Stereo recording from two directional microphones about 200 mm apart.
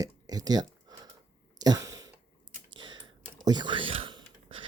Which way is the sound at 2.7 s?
20° right (ahead or behind).